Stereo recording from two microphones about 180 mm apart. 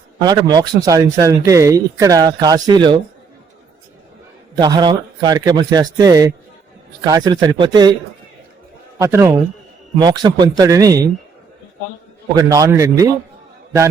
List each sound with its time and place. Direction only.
0.2 s a man's voice: 25° right (ahead or behind)
4.5 s a man's voice: 25° right (ahead or behind)
9.0 s a man's voice: 15° right (ahead or behind)
12.4 s a man's voice: 20° right (ahead or behind)